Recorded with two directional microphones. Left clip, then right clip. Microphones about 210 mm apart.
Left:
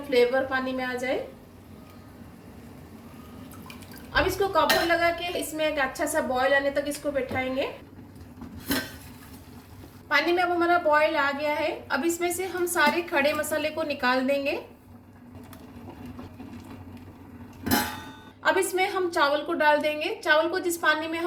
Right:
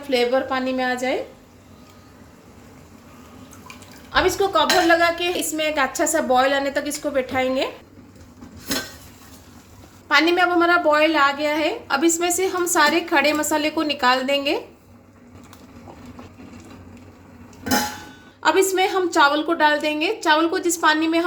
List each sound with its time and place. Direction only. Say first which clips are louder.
0.1 s a woman's voice: right 3 dB; 40° right (ahead or behind)
4.1 s a woman's voice: right 5 dB; 45° right (ahead or behind)
10.1 s a woman's voice: right 6 dB; 50° right (ahead or behind)
18.4 s a woman's voice: right 6 dB; 50° right (ahead or behind)